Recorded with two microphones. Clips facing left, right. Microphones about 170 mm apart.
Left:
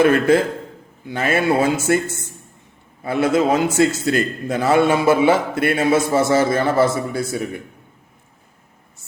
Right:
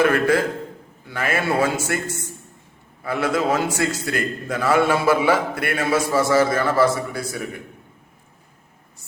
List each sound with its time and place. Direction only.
0.0 s a man's voice: 25° left (ahead or behind)